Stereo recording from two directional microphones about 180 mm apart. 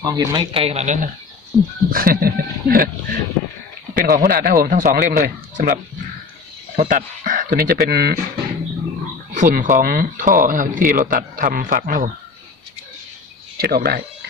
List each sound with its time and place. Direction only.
0.0 s a man's voice: 20° right (ahead or behind)
0.6 s speech: 35° right (ahead or behind)
1.5 s speech: 5° right (ahead or behind)
1.9 s speech: 55° right (ahead or behind)
3.9 s speech: 50° right (ahead or behind)
9.3 s speech: 45° right (ahead or behind)
13.6 s speech: 55° right (ahead or behind)